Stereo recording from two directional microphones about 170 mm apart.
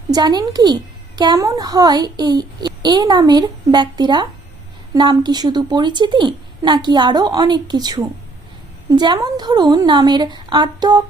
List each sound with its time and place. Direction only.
0.1 s a woman's voice: 25° right (ahead or behind)